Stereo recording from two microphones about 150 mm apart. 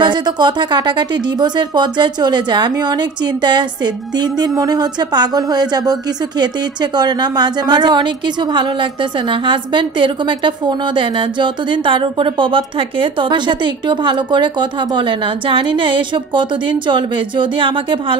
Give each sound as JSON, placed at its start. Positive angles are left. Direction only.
{"t": 0.0, "sound": "speech", "side_deg": -30}